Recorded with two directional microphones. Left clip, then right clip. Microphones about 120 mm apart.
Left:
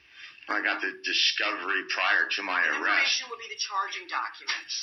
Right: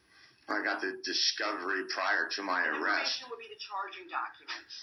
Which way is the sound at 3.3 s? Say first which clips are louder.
Left 8 dB; 50° left (ahead or behind).